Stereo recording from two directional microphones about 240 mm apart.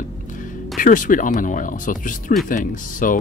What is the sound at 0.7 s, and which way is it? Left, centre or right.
Speech, left.